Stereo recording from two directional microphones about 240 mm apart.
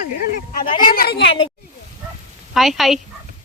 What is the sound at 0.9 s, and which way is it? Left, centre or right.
Speech, left.